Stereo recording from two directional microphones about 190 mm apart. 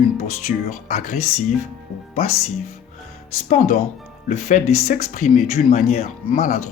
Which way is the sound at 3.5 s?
35° left (ahead or behind).